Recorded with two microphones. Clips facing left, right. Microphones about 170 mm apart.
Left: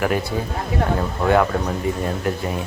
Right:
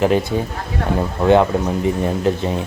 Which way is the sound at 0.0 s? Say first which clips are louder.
Right 5 dB; 20° right (ahead or behind).